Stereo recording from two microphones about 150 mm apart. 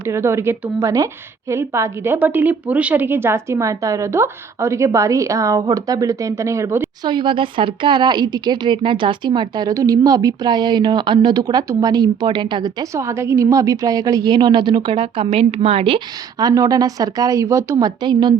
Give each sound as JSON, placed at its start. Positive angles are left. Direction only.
{"t": 0.0, "sound": "speech", "side_deg": -20}
{"t": 7.0, "sound": "speech", "side_deg": -30}
{"t": 16.4, "sound": "speech", "side_deg": -25}